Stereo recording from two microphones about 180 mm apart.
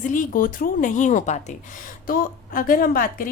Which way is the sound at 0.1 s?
50° left (ahead or behind).